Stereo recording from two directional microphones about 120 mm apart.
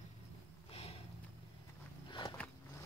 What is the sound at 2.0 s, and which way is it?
Biting, 40° left (ahead or behind).